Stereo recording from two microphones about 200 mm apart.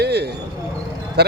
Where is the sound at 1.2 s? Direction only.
55° right (ahead or behind).